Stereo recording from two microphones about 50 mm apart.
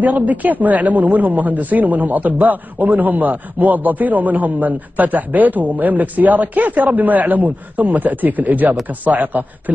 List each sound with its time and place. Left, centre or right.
0.0 s speech: right